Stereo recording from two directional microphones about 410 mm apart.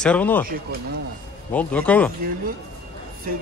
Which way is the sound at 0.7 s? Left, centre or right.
Right.